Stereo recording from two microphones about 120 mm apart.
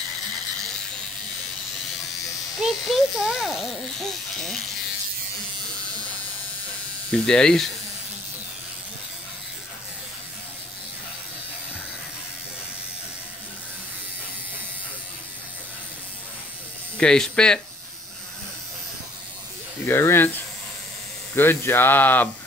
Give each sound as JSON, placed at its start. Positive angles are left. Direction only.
{"t": 2.6, "sound": "a child's voice", "side_deg": -5}
{"t": 7.1, "sound": "a child's voice", "side_deg": 5}
{"t": 16.9, "sound": "speech", "side_deg": 5}
{"t": 19.9, "sound": "speech", "side_deg": 20}
{"t": 21.4, "sound": "speech", "side_deg": 20}